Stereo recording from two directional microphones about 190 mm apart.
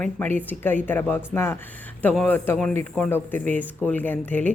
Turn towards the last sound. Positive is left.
turn(degrees=10)  # may be behind; listen again after turning